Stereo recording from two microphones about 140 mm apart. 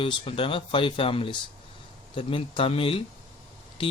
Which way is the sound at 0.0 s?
40° left (ahead or behind).